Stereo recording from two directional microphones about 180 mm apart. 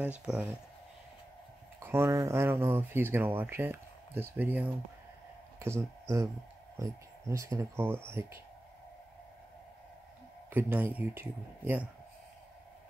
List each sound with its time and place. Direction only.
0.0 s speech: 5° right (ahead or behind)
1.8 s speech: 15° right (ahead or behind)
10.5 s speech: 10° right (ahead or behind)